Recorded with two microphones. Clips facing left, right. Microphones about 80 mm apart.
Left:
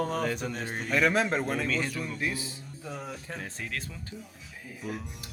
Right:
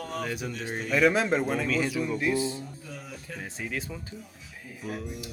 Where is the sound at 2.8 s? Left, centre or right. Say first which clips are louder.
Left 4 dB; left.